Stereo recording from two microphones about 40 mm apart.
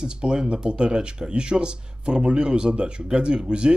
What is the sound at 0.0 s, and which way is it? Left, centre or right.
Speech, centre.